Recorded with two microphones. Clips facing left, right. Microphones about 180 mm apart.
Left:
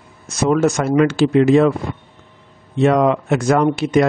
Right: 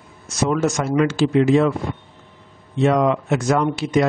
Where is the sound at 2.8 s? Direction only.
55° left (ahead or behind).